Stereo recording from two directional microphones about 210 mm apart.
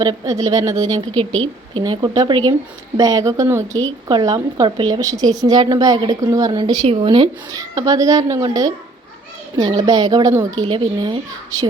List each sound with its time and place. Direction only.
0.0 s a woman's voice: 15° right (ahead or behind)